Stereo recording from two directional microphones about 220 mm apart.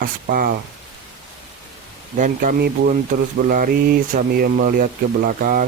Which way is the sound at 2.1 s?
35° right (ahead or behind).